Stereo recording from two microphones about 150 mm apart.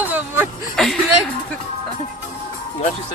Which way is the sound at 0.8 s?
5° left (ahead or behind).